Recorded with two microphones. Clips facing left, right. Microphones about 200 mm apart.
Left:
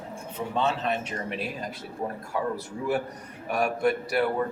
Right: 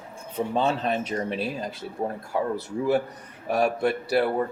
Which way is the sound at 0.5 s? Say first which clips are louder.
Right 2 dB; 35° right (ahead or behind).